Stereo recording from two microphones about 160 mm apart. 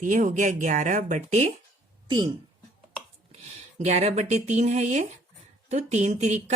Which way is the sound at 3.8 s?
45° right (ahead or behind).